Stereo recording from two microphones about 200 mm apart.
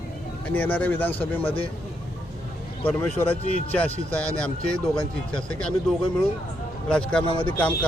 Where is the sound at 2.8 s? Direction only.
10° left (ahead or behind).